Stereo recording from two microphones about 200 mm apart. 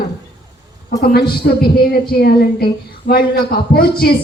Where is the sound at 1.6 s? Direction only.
50° left (ahead or behind).